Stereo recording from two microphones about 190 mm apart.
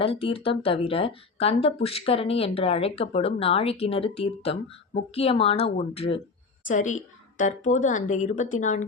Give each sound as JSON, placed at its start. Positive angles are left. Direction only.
{"t": 0.0, "sound": "speech", "side_deg": 30}
{"t": 6.7, "sound": "speech", "side_deg": 40}